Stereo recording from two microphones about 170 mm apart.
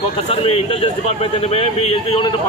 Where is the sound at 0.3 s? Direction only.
35° left (ahead or behind).